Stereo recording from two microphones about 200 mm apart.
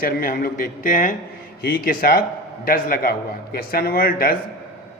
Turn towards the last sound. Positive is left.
turn(degrees=45)  # may be behind; listen again after turning